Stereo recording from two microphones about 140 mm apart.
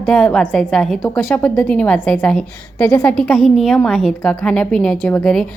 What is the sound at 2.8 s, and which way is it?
Speech, 15° left (ahead or behind).